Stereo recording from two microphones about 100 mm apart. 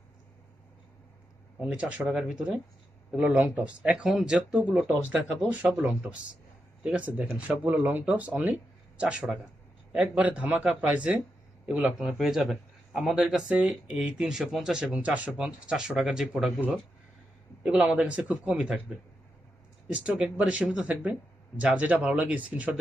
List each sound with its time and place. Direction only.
1.7 s a man's voice: 10° right (ahead or behind)
3.3 s a man's voice: 20° right (ahead or behind)
17.6 s a man's voice: 10° right (ahead or behind)